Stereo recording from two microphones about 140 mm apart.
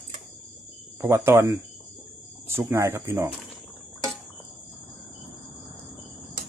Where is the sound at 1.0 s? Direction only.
15° right (ahead or behind).